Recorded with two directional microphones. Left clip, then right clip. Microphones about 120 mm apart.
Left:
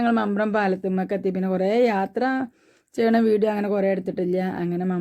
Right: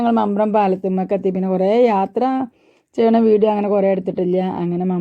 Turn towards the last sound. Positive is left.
turn(degrees=-20)  # may be behind; listen again after turning